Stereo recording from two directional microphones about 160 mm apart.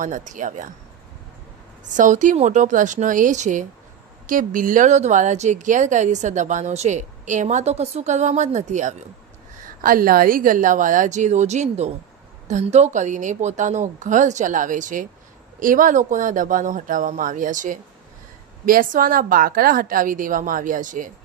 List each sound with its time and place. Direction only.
0.0 s speech: 50° right (ahead or behind)
1.8 s speech: 50° right (ahead or behind)
9.6 s a woman's voice: 60° right (ahead or behind)